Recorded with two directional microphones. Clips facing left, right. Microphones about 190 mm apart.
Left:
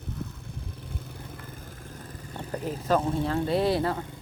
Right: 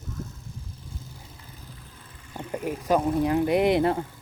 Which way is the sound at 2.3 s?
10° right (ahead or behind).